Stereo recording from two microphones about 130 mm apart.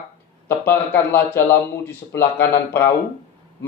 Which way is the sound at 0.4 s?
15° left (ahead or behind).